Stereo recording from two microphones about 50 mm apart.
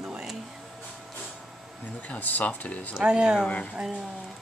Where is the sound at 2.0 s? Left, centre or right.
Left.